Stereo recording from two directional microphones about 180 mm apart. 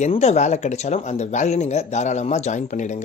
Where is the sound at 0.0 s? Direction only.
35° left (ahead or behind).